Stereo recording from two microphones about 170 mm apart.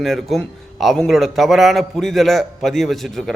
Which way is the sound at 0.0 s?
Centre (ahead or behind).